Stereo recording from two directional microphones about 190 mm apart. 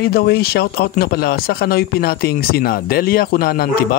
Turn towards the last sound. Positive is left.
turn(degrees=50)  # may be behind; listen again after turning